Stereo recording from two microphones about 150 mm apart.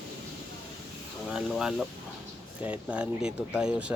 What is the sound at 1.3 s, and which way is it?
Speech, 5° right (ahead or behind).